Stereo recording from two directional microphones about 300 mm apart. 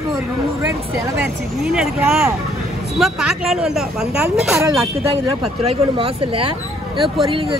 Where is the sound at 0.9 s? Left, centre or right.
Centre.